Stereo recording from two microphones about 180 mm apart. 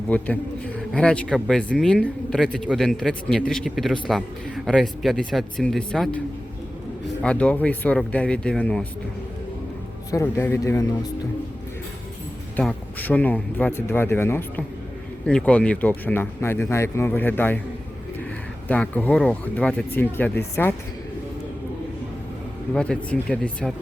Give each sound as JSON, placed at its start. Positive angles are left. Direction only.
{"t": 0.1, "sound": "a man's voice", "side_deg": 10}
{"t": 10.1, "sound": "speech", "side_deg": 15}
{"t": 12.5, "sound": "speech", "side_deg": 10}
{"t": 18.7, "sound": "speech", "side_deg": 10}
{"t": 22.7, "sound": "a man's voice", "side_deg": 5}